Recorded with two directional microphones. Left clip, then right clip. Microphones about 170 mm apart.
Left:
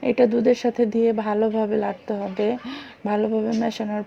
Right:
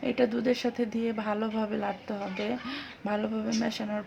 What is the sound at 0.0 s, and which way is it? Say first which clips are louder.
Speech: left 9 dB; 25° left (ahead or behind).